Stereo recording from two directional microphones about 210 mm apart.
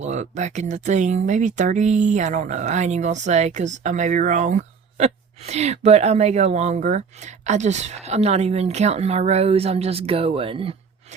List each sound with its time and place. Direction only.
0.0 s speech: 35° right (ahead or behind)